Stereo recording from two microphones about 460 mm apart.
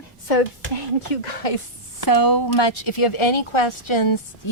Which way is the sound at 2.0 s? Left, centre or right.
Left.